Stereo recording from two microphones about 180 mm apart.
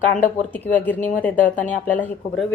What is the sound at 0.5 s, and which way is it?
Speech, 10° left (ahead or behind).